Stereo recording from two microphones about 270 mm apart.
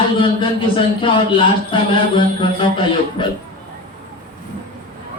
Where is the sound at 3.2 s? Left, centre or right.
Centre.